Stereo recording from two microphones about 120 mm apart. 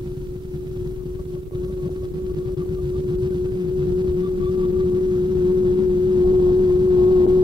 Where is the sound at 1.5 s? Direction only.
40° right (ahead or behind).